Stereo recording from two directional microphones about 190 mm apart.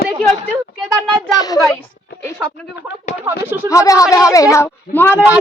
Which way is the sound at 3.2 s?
10° right (ahead or behind).